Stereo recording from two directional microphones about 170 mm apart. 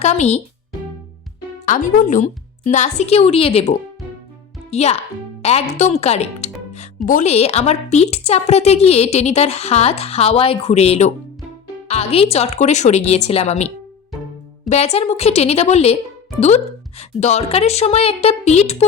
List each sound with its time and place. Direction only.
0.0 s speech: 40° left (ahead or behind)
1.6 s speech: 50° left (ahead or behind)
14.7 s speech: 40° left (ahead or behind)
17.0 s speech: 40° left (ahead or behind)